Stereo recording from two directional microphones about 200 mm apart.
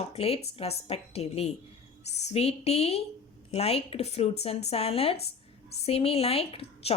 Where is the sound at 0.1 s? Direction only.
30° left (ahead or behind).